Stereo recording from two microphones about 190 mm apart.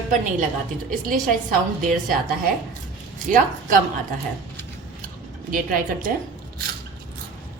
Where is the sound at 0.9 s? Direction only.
45° right (ahead or behind).